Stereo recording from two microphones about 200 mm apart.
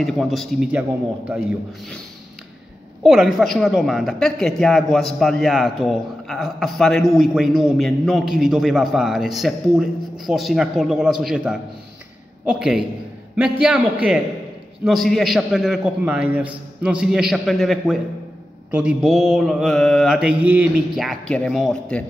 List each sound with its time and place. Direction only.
0.0 s speech: centre (ahead or behind)
3.0 s speech: centre (ahead or behind)